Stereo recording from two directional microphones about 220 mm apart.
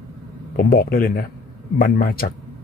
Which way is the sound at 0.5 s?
40° left (ahead or behind).